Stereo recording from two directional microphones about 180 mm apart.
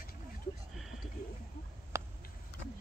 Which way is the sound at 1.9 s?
15° right (ahead or behind).